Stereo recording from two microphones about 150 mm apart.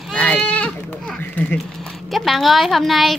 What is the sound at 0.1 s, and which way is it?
Goat, 5° left (ahead or behind).